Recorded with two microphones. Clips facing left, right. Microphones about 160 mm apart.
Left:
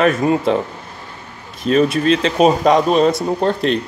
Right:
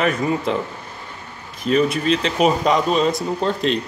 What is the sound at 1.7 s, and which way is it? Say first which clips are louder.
Speech: left 4 dB; 45° left (ahead or behind).